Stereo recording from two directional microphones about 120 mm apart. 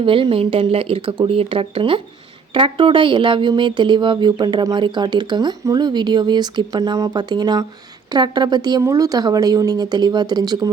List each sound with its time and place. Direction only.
0.0 s speech: 45° right (ahead or behind)